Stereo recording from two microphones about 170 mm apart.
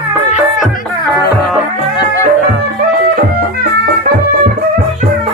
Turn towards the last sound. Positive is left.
turn(degrees=-65)  # may be behind; listen again after turning